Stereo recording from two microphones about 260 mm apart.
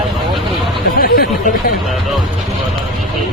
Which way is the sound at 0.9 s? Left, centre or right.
Left.